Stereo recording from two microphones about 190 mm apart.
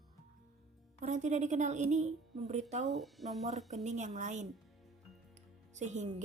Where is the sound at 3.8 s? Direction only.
40° right (ahead or behind).